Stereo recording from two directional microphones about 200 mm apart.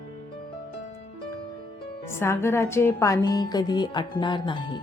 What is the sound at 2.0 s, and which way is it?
Speech, 15° left (ahead or behind).